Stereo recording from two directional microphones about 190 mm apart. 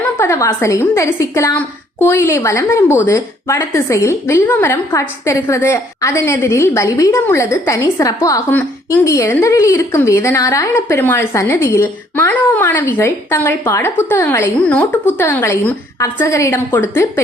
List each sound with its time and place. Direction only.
0.2 s a woman's voice: 15° left (ahead or behind)